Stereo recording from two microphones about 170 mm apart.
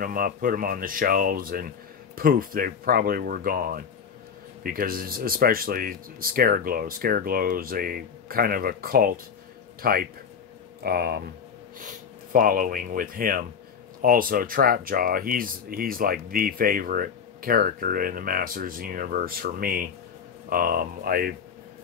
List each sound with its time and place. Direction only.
0.0 s speech: 55° right (ahead or behind)
11.8 s speech: 50° right (ahead or behind)